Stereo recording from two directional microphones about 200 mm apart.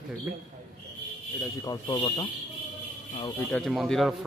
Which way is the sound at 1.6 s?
20° left (ahead or behind).